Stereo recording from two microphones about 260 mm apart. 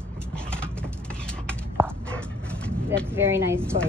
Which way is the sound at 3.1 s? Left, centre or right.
Centre.